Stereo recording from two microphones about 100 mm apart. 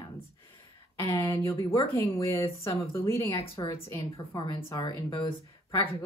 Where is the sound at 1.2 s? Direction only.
30° left (ahead or behind).